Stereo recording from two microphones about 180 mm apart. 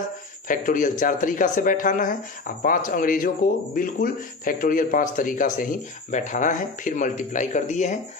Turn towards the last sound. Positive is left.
turn(degrees=40)  # may be behind; listen again after turning